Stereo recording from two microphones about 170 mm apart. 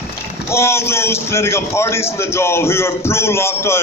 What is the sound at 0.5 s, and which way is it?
A man's voice, 15° left (ahead or behind).